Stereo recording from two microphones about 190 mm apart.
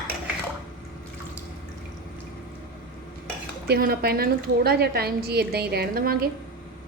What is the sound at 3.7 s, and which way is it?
Speech, 55° right (ahead or behind).